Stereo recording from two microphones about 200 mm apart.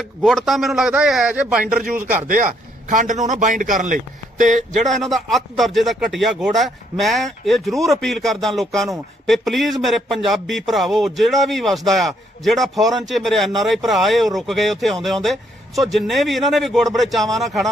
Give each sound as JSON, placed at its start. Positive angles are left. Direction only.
{"t": 0.0, "sound": "speech", "side_deg": 0}
{"t": 2.1, "sound": "a man's voice", "side_deg": -40}
{"t": 4.9, "sound": "speech", "side_deg": 0}